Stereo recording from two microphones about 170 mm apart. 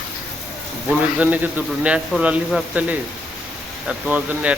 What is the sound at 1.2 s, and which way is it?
A man's voice, 10° right (ahead or behind).